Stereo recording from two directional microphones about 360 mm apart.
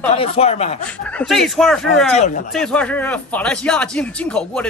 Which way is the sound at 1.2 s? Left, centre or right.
Centre.